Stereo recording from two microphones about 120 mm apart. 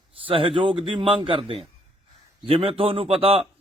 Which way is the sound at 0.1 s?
50° right (ahead or behind).